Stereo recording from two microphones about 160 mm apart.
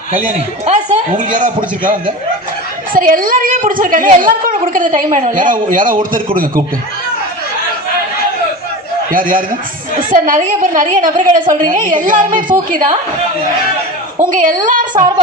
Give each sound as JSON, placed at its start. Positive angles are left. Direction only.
{"t": 0.3, "sound": "a man's voice", "side_deg": -50}
{"t": 2.9, "sound": "a woman's voice", "side_deg": -60}
{"t": 9.1, "sound": "a woman's voice", "side_deg": -60}
{"t": 14.2, "sound": "a woman's voice", "side_deg": -55}